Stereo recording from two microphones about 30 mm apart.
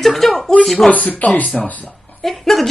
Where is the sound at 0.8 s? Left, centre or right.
Left.